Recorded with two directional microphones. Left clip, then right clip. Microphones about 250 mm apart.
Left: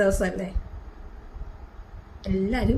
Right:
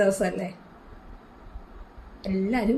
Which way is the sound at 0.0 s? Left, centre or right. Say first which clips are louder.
Even; centre.